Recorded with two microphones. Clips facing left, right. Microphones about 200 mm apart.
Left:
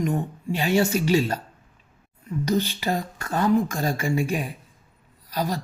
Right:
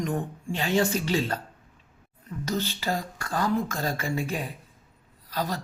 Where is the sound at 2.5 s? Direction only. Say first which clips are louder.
Left 4 dB; 15° left (ahead or behind).